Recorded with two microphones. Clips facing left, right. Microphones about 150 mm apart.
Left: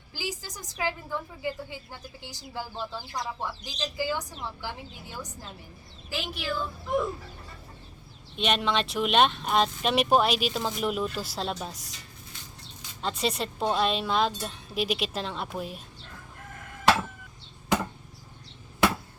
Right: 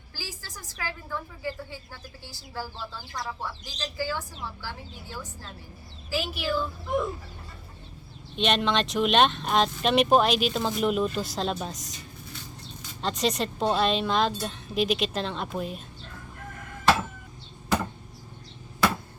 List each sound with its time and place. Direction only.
0.1 s a woman's voice: 20° left (ahead or behind)
6.1 s speech: 5° right (ahead or behind)
8.4 s speech: 5° left (ahead or behind)
13.0 s speech: 5° left (ahead or behind)